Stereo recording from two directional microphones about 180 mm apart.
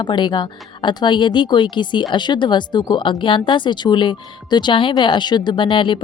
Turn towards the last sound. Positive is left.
turn(degrees=25)  # may be behind; listen again after turning